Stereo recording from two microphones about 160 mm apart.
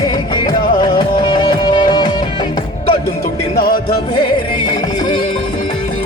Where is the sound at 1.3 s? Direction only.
30° left (ahead or behind).